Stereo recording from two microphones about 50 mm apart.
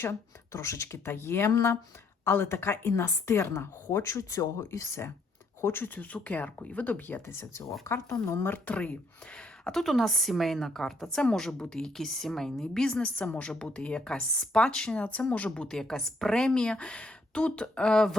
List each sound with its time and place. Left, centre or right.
0.0 s a woman's voice: left
1.5 s speech: left
2.2 s a woman's voice: left
3.9 s speech: left
5.5 s speech: left
7.3 s speech: left
8.4 s speech: left
8.7 s speech: left
9.7 s a woman's voice: centre
13.2 s a woman's voice: left; by 18.2 s centre